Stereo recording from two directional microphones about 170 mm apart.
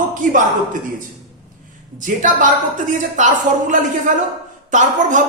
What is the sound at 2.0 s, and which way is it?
Speech, 50° right (ahead or behind).